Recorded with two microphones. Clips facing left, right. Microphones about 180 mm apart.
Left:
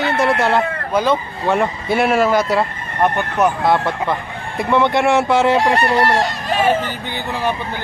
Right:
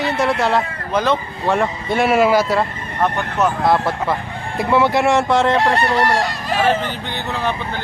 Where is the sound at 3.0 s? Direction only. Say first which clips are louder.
Left 2 dB; 15° left (ahead or behind).